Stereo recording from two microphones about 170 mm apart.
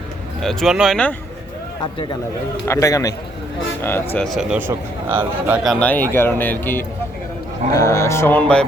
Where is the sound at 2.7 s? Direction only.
20° left (ahead or behind).